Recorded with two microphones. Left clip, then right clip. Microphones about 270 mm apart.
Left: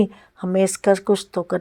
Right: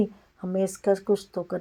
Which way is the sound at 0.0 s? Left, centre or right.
Left.